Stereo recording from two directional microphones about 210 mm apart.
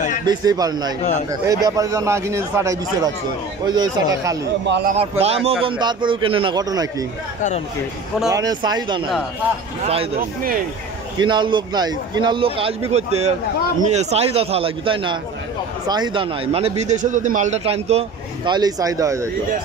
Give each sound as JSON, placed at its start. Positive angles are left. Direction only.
{"t": 0.3, "sound": "a man's voice", "side_deg": -20}
{"t": 4.6, "sound": "a man's voice", "side_deg": -55}
{"t": 5.2, "sound": "a man's voice", "side_deg": -30}
{"t": 8.3, "sound": "a man's voice", "side_deg": -20}
{"t": 11.1, "sound": "a man's voice", "side_deg": -20}